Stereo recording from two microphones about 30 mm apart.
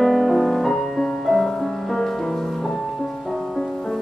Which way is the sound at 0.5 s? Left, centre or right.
Centre.